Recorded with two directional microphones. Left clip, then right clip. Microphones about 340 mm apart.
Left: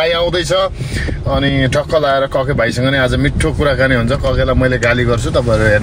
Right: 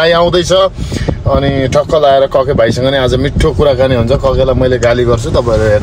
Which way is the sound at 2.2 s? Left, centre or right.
Right.